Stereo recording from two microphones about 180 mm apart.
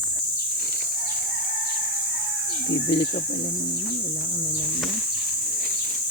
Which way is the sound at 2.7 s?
80° left.